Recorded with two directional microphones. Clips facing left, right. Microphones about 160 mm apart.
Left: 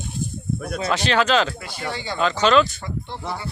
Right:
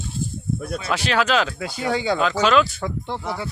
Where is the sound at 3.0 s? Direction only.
90° right.